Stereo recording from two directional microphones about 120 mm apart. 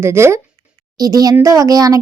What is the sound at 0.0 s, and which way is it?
A woman's voice, 20° right (ahead or behind).